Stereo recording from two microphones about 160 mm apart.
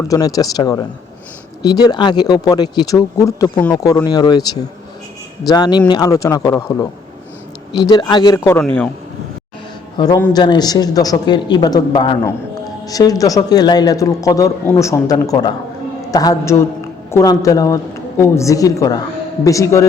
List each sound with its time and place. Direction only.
0.1 s a man's voice: 20° left (ahead or behind)
5.5 s a man's voice: 25° left (ahead or behind)
8.4 s a man's voice: 10° left (ahead or behind)
10.0 s a man's voice: 30° left (ahead or behind)